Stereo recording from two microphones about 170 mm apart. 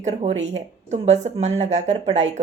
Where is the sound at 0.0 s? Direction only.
40° right (ahead or behind).